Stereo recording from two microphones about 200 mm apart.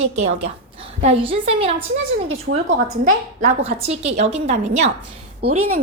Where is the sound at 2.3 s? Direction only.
85° right.